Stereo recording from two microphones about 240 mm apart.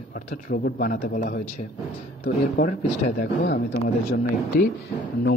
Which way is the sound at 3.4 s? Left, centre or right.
Left.